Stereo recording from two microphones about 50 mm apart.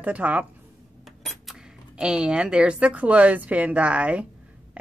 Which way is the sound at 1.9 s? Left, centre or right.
Centre.